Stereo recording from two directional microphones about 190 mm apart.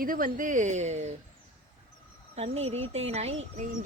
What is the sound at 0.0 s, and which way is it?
Speech, 45° right (ahead or behind).